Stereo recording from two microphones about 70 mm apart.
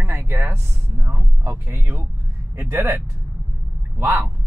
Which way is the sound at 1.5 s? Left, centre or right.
Right.